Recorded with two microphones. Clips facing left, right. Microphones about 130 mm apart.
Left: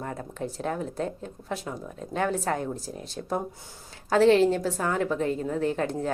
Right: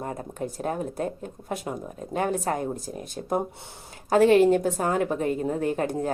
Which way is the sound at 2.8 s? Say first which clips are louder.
Right 2 dB; 50° right (ahead or behind).